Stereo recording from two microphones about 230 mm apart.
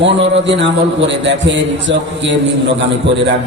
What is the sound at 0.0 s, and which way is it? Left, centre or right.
A man's voice, right.